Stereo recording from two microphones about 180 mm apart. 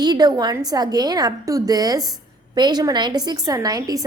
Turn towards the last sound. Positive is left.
turn(degrees=-20)  # may be behind; listen again after turning